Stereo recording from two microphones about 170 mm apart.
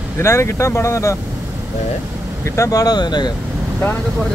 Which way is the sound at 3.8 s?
10° left (ahead or behind).